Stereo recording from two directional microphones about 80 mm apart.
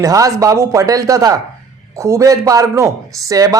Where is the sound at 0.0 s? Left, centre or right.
Right.